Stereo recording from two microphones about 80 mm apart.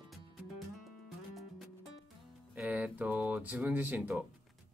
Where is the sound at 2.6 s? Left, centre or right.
Right.